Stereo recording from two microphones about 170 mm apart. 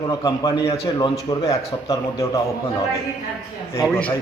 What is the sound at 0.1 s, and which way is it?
A man's voice, 20° left (ahead or behind).